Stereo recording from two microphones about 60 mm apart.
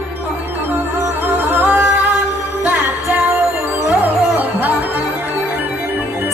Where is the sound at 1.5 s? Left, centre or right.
Right.